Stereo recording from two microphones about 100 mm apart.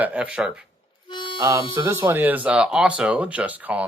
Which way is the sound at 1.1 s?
50° left (ahead or behind).